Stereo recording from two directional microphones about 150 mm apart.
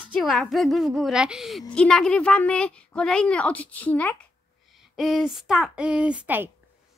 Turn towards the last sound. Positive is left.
turn(degrees=-10)  # may be behind; listen again after turning